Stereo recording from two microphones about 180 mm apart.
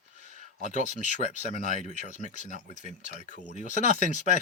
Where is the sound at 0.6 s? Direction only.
40° left (ahead or behind).